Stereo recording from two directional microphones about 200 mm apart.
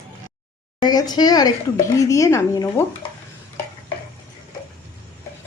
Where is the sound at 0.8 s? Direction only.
20° left (ahead or behind).